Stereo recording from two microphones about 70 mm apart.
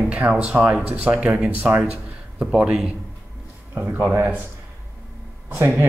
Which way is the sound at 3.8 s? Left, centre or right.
Right.